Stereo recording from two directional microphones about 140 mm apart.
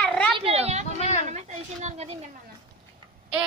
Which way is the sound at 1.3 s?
55° right (ahead or behind).